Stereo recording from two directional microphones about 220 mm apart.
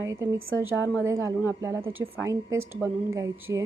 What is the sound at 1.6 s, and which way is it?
A woman's voice, 10° right (ahead or behind).